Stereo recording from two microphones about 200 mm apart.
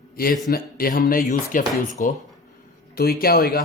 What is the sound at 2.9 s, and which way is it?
Speech, 50° left (ahead or behind).